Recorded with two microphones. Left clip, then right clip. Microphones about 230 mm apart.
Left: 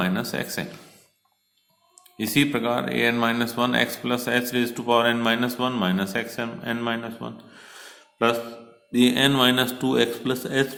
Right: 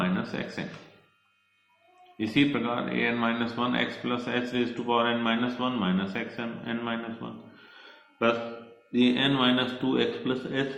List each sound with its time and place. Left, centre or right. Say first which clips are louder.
0.0 s speech: left 4 dB; left
2.1 s a man's voice: left 3 dB; left